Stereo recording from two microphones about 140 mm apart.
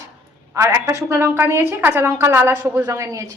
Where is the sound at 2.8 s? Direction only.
25° right (ahead or behind).